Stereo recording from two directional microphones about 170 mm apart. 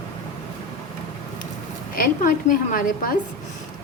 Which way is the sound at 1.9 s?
55° left (ahead or behind).